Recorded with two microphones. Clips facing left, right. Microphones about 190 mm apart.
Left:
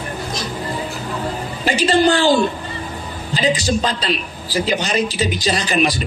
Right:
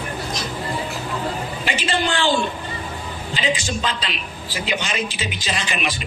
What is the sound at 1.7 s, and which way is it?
A man's voice, 40° left (ahead or behind).